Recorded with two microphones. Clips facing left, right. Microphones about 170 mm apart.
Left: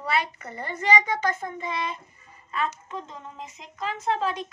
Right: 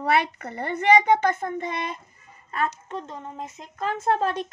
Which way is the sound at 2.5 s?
45° right (ahead or behind).